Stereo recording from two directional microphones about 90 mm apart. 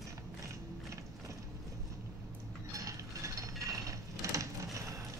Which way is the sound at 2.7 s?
35° right (ahead or behind).